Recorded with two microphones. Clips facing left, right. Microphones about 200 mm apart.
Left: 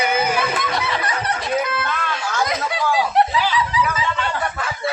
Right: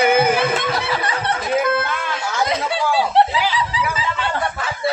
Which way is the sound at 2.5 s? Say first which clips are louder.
Right 2 dB; 30° right (ahead or behind).